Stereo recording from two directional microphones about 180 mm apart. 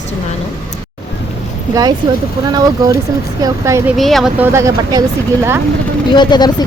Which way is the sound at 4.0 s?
Centre (ahead or behind).